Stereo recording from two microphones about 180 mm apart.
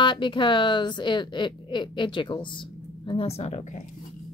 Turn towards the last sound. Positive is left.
turn(degrees=40)  # may be behind; listen again after turning